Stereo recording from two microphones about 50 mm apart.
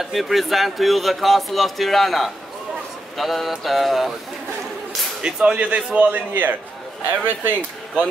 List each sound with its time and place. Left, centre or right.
0.0 s a man's voice: centre
5.2 s a man's voice: centre; by 8.0 s right